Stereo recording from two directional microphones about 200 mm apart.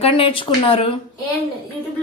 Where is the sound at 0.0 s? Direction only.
25° left (ahead or behind).